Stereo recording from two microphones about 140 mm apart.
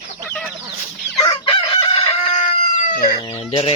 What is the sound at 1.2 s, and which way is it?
Chicken, 30° left (ahead or behind).